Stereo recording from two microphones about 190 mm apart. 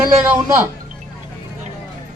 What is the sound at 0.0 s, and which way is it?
Speech, 10° right (ahead or behind).